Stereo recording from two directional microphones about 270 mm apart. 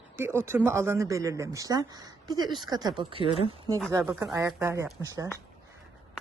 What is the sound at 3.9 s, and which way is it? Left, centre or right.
Speech, centre.